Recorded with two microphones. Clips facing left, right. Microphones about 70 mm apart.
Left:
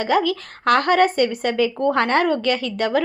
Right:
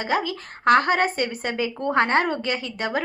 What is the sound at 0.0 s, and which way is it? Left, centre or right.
A woman's voice, right.